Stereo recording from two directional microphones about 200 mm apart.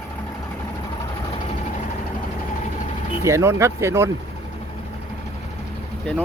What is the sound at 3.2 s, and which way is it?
Speech, 15° right (ahead or behind).